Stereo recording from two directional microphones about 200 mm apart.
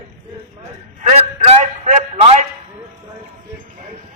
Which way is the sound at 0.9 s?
35° right (ahead or behind).